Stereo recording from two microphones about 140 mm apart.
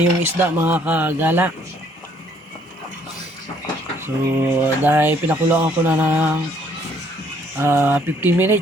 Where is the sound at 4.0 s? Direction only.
15° right (ahead or behind).